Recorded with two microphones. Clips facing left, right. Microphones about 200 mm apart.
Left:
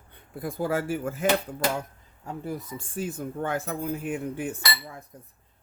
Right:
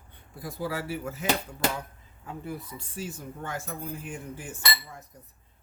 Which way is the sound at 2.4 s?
50° left (ahead or behind).